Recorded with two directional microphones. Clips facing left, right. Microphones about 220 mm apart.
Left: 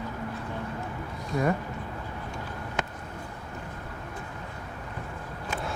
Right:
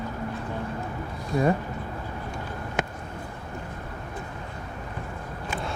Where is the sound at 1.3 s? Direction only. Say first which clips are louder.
Right 3 dB; 30° right (ahead or behind).